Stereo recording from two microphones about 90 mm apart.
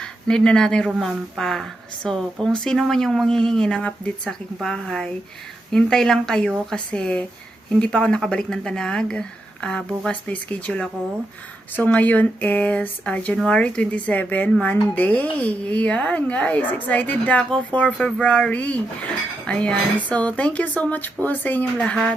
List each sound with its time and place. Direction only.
0.0 s speech: 10° left (ahead or behind)